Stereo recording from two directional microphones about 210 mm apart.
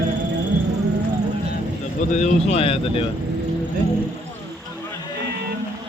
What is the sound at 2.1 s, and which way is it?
Speech, 35° left (ahead or behind).